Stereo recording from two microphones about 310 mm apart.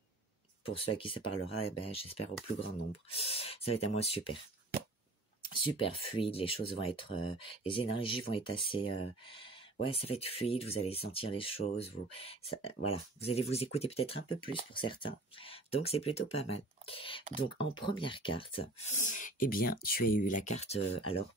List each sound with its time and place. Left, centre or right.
0.7 s speech: centre
5.5 s speech: centre